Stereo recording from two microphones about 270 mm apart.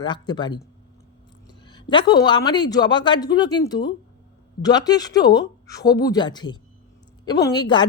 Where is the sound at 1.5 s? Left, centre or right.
Centre.